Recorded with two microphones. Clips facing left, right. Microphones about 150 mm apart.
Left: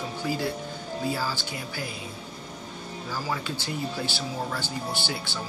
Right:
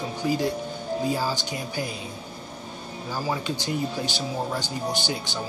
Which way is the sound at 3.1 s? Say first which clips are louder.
Right 4 dB; 20° right (ahead or behind).